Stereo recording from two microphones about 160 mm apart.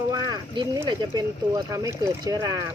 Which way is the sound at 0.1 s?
25° right (ahead or behind).